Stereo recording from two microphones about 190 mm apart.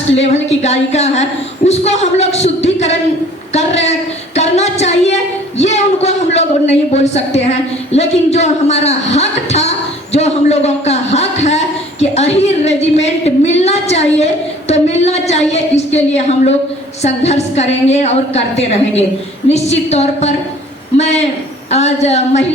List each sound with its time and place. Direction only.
0.1 s a man's voice: 35° left (ahead or behind)